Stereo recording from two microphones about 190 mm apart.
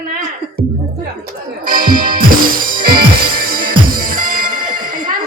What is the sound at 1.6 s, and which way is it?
Music, 50° right (ahead or behind).